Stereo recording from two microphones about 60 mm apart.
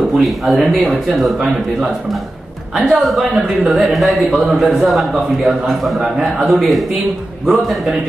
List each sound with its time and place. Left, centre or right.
0.2 s speech: centre
3.0 s speech: centre
5.1 s a man's voice: centre
5.7 s speech: centre